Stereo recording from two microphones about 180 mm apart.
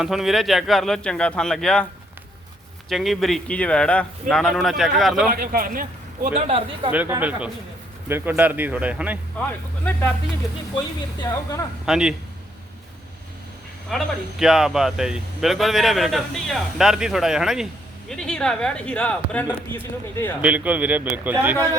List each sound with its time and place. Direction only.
0.0 s speech: centre (ahead or behind)
2.9 s speech: centre (ahead or behind)
5.3 s a man's voice: 50° right (ahead or behind)
6.2 s a man's voice: 35° right (ahead or behind)
6.9 s a man's voice: 10° right (ahead or behind)
9.4 s speech: 10° left (ahead or behind)
11.2 s speech: 15° left (ahead or behind)
11.9 s speech: 5° right (ahead or behind)
13.9 s speech: 5° right (ahead or behind)
20.4 s a man's voice: 10° right (ahead or behind)